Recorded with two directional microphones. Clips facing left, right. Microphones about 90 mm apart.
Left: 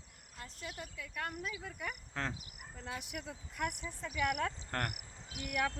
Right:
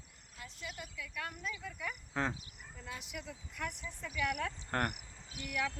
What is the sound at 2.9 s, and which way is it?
Speech, 55° left (ahead or behind).